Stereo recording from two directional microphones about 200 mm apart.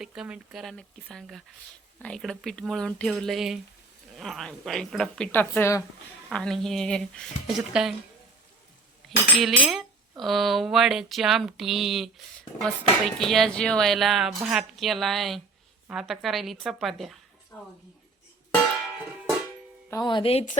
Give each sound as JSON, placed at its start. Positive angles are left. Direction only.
{"t": 0.0, "sound": "speech", "side_deg": -5}
{"t": 9.0, "sound": "speech", "side_deg": 0}
{"t": 19.9, "sound": "speech", "side_deg": 20}